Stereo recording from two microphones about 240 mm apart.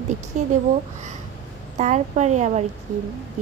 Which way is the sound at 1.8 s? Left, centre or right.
Right.